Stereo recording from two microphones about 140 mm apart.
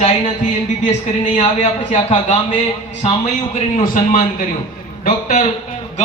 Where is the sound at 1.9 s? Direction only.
50° left (ahead or behind).